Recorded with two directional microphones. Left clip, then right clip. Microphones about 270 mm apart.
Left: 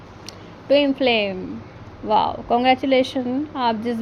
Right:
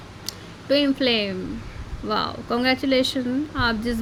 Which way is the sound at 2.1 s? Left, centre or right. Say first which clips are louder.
Left 6 dB; right.